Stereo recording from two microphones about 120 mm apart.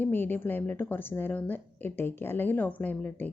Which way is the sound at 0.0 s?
15° left (ahead or behind).